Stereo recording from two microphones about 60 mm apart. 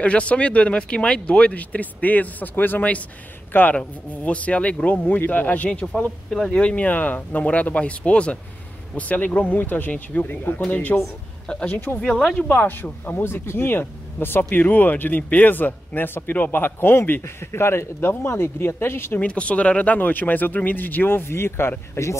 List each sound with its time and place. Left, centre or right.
0.0 s speech: left
5.0 s speech: left
6.3 s speech: centre
6.6 s speech: left
12.1 s speech: centre
12.4 s speech: left
13.2 s speech: left
19.1 s speech: left